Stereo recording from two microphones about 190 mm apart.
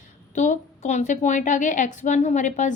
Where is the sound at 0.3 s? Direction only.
40° left (ahead or behind).